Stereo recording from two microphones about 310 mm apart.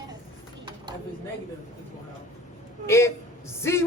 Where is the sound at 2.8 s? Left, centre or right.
Centre.